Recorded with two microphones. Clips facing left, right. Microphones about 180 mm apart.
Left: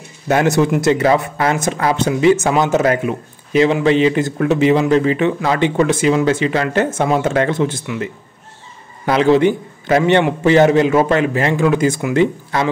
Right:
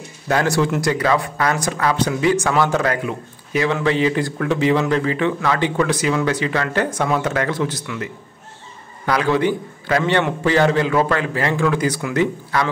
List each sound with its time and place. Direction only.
0.3 s speech: 20° left (ahead or behind)